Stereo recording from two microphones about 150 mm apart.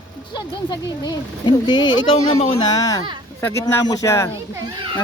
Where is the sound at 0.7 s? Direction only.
30° left (ahead or behind).